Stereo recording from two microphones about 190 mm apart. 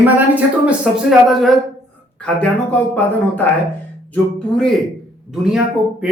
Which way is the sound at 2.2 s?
5° left (ahead or behind).